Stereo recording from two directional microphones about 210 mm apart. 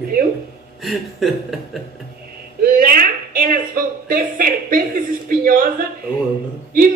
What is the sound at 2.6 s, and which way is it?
A woman's voice, 45° right (ahead or behind).